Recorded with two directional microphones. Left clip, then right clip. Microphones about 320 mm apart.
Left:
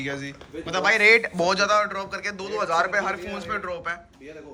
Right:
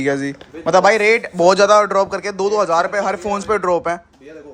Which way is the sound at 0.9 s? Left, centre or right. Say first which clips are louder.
Right 3 dB; centre.